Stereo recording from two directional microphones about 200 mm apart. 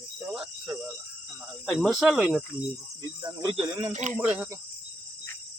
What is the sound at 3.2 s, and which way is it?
Speech, 25° right (ahead or behind).